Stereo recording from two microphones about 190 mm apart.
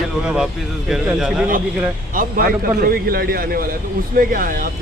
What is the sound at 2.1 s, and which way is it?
A man's voice, 50° right (ahead or behind).